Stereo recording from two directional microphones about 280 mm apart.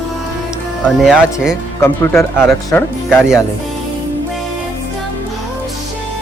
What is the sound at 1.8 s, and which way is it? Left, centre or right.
Speech, centre.